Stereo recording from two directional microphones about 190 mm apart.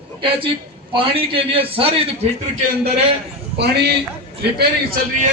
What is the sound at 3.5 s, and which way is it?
Speech, 60° right (ahead or behind).